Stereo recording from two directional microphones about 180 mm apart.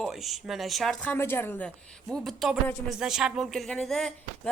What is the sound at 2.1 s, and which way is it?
A woman's voice, centre (ahead or behind).